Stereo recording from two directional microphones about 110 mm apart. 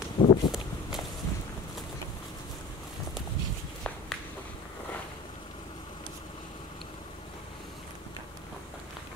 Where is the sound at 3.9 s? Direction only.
10° left (ahead or behind).